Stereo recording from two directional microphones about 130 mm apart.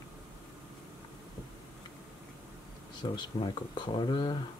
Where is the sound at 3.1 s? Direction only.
35° left (ahead or behind).